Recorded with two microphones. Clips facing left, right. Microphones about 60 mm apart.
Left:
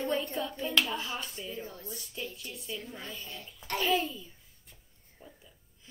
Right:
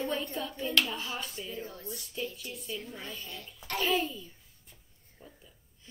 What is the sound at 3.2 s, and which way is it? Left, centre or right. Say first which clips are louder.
Speech: even; left.